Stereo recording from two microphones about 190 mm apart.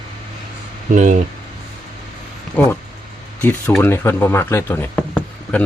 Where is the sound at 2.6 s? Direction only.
5° left (ahead or behind).